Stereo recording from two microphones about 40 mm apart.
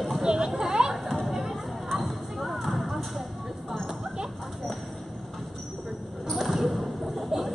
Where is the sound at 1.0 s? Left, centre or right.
Centre.